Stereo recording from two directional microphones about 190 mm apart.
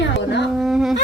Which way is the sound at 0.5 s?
5° right (ahead or behind).